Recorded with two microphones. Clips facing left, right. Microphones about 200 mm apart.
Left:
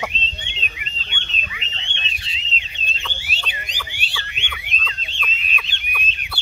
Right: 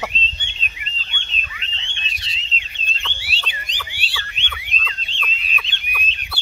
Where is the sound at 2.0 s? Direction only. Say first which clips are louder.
Left 1 dB; 35° right (ahead or behind).